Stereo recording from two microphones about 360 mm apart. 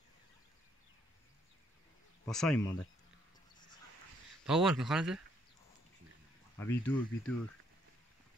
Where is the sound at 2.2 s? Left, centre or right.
Centre.